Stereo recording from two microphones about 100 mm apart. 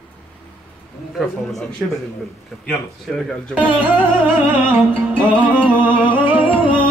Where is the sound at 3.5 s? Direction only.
15° right (ahead or behind).